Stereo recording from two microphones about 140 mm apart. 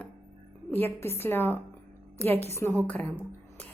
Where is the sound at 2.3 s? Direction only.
50° right (ahead or behind).